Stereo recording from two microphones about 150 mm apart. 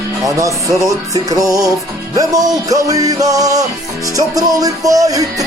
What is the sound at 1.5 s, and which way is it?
Music, 20° right (ahead or behind).